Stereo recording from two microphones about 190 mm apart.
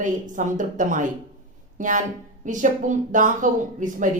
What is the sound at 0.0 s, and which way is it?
Speech, 40° right (ahead or behind).